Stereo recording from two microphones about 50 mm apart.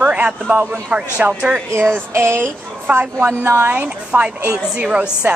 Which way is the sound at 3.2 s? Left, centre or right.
Right.